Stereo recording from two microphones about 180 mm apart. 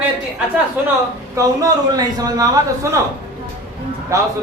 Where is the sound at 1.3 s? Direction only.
20° right (ahead or behind).